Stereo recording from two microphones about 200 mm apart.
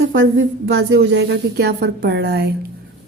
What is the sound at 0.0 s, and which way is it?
Speech, 75° right (ahead or behind).